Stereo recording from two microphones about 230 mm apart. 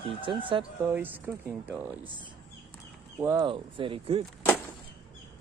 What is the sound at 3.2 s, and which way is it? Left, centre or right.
Speech, centre.